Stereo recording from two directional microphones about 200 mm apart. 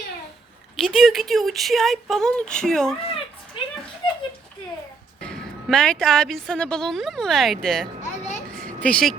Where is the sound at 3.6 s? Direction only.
25° left (ahead or behind).